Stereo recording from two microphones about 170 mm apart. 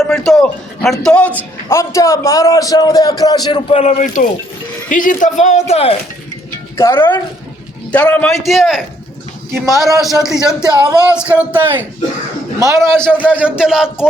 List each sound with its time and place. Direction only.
0.0 s a man's voice: centre (ahead or behind)
1.7 s a man's voice: 15° left (ahead or behind)
3.7 s speech: 40° left (ahead or behind)
6.7 s a man's voice: 15° left (ahead or behind); by 14.1 s 5° right (ahead or behind)